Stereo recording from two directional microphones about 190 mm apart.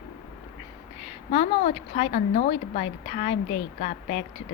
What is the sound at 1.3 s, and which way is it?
Speech, 35° left (ahead or behind).